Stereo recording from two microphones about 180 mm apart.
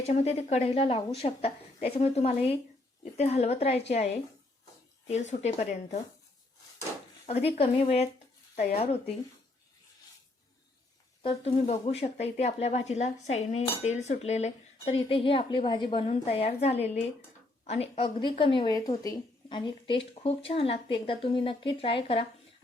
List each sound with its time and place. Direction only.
0.0 s a woman's voice: 35° left (ahead or behind)
7.3 s a woman's voice: 35° left (ahead or behind)
11.2 s a woman's voice: 30° left (ahead or behind)